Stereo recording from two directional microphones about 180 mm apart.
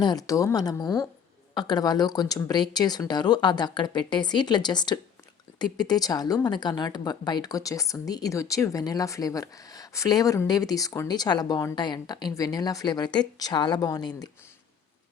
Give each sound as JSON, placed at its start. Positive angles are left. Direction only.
{"t": 0.0, "sound": "speech", "side_deg": 20}